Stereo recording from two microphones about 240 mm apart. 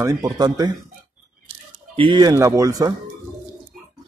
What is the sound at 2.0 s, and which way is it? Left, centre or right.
Speech, centre.